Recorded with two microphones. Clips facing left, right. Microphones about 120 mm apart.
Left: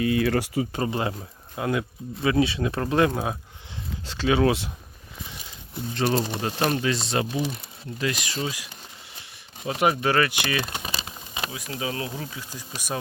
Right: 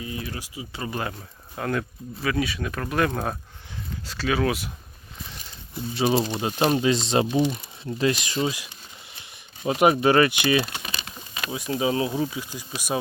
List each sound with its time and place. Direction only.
0.0 s speech: 75° left (ahead or behind)
0.6 s speech: 45° left (ahead or behind)
0.9 s speech: 25° left (ahead or behind)
1.5 s speech: 15° left (ahead or behind)
2.2 s speech: 25° left (ahead or behind)
3.1 s speech: 10° left (ahead or behind)
4.0 s speech: 25° left (ahead or behind)
5.7 s speech: 10° right (ahead or behind); by 8.6 s 25° right (ahead or behind)
9.6 s speech: 20° right (ahead or behind)
10.8 s a sound: 25° left (ahead or behind)
11.5 s speech: 25° right (ahead or behind)